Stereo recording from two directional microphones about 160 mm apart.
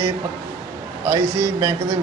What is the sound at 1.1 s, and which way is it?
Speech, 20° right (ahead or behind).